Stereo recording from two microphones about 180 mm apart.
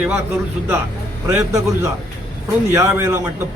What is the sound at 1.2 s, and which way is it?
A man's voice, 15° right (ahead or behind).